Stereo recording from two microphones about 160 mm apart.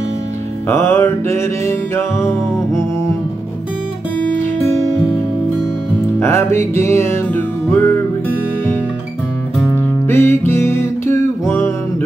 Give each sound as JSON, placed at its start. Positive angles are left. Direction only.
{"t": 0.7, "sound": "music", "side_deg": 15}
{"t": 6.1, "sound": "music", "side_deg": 15}
{"t": 10.0, "sound": "music", "side_deg": 15}